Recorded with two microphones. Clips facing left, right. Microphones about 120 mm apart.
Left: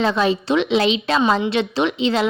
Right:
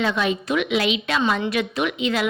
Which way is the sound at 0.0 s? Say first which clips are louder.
Left 4 dB; 35° left (ahead or behind).